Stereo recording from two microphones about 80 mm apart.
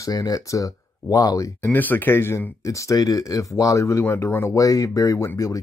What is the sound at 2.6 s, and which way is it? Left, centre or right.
Speech, left.